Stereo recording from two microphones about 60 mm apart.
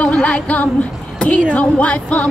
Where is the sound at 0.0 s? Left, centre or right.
Centre.